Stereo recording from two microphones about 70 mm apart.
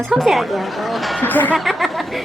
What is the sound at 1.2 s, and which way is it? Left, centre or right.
Speech, left.